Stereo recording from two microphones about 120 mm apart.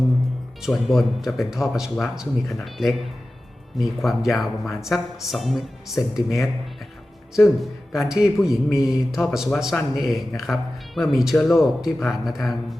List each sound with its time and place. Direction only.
0.6 s speech: centre (ahead or behind)